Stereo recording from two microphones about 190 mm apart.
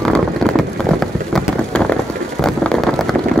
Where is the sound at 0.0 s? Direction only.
5° left (ahead or behind).